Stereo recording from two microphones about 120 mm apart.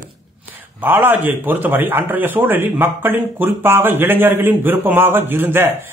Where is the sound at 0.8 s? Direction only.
15° right (ahead or behind).